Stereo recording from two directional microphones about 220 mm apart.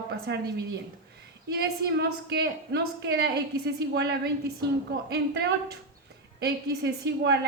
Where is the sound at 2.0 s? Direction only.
45° right (ahead or behind).